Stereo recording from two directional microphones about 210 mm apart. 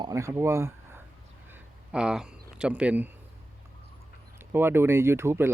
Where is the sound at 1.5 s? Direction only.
5° right (ahead or behind).